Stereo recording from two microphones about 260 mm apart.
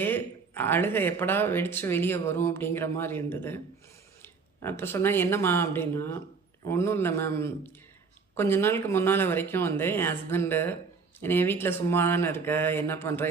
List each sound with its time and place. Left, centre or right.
0.0 s speech: centre